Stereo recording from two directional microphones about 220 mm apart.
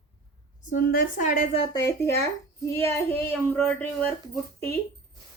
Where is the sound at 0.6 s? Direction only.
40° left (ahead or behind).